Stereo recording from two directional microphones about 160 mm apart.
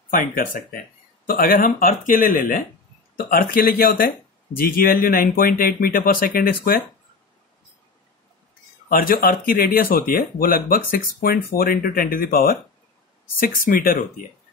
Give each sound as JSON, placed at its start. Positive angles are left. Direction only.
{"t": 0.1, "sound": "speech", "side_deg": 55}
{"t": 8.8, "sound": "speech", "side_deg": 65}